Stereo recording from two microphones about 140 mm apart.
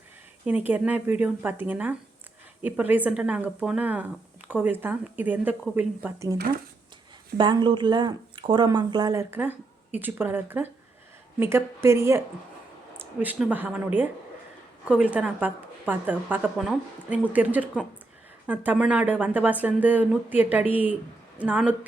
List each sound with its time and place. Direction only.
0.4 s speech: 10° right (ahead or behind)
7.3 s speech: 35° right (ahead or behind)
9.3 s speech: 15° right (ahead or behind)